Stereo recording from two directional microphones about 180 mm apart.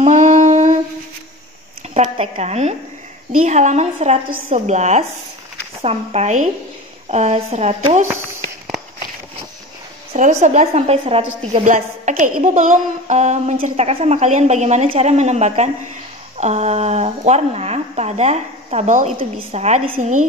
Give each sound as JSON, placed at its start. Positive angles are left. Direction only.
{"t": 0.0, "sound": "humming", "side_deg": -40}
{"t": 2.0, "sound": "a woman's voice", "side_deg": -35}
{"t": 10.1, "sound": "a woman's voice", "side_deg": -40}